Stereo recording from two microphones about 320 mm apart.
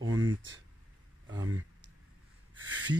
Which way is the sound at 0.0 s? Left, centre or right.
Right.